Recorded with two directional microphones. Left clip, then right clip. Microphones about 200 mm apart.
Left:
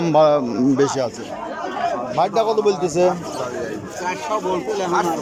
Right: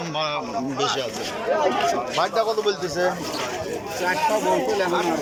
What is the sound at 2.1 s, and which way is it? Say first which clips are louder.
Speech: left 4 dB; 15° left (ahead or behind).